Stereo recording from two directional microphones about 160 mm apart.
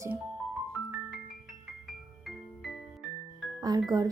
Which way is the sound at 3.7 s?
25° right (ahead or behind).